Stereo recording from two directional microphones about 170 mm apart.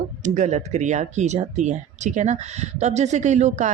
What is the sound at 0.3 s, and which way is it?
Speech, 45° right (ahead or behind).